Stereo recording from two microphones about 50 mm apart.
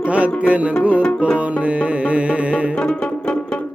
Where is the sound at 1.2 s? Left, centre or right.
Right.